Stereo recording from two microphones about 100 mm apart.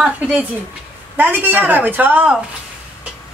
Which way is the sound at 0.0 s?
15° right (ahead or behind).